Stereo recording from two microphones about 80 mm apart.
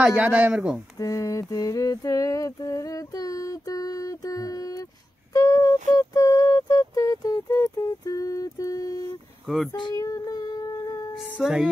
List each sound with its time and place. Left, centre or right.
0.0 s a man's voice: centre
0.9 s a sound: left
11.4 s music: centre